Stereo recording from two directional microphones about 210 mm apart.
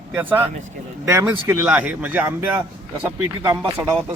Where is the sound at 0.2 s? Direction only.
10° right (ahead or behind).